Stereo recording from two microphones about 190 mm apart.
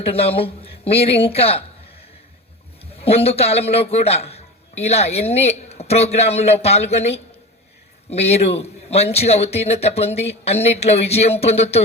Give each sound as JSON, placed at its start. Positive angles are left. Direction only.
{"t": 0.0, "sound": "a man's voice", "side_deg": 30}
{"t": 3.0, "sound": "a man's voice", "side_deg": 30}